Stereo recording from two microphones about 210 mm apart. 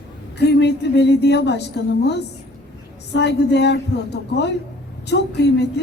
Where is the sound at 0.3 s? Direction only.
55° left (ahead or behind).